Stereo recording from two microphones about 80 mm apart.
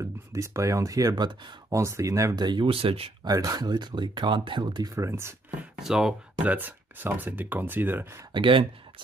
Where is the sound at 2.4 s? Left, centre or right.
Right.